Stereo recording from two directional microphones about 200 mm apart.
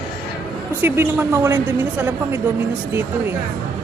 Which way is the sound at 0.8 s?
10° right (ahead or behind).